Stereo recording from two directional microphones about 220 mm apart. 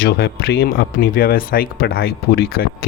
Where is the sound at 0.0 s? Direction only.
45° left (ahead or behind).